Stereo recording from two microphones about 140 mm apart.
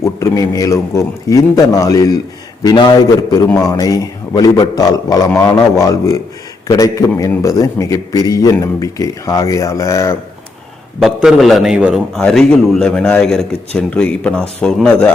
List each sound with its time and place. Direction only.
0.0 s a man's voice: 20° left (ahead or behind)
11.0 s a man's voice: 5° right (ahead or behind)